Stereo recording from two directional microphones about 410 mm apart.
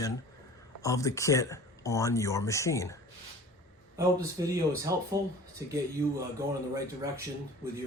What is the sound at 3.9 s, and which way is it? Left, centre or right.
Speech, centre.